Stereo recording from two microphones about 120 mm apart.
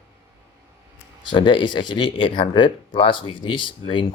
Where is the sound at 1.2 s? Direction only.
40° left (ahead or behind).